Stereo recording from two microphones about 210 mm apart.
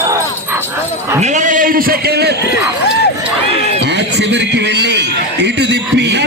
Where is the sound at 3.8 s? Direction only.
55° right (ahead or behind).